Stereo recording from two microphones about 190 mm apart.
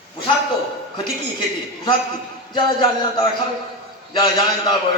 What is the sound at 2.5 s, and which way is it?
A man's voice, 25° left (ahead or behind).